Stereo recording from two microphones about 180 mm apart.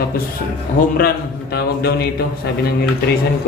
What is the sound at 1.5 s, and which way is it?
Speech, 60° left (ahead or behind).